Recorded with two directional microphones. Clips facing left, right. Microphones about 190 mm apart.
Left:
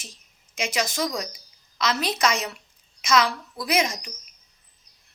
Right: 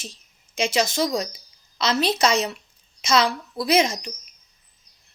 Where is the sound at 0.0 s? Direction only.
25° right (ahead or behind).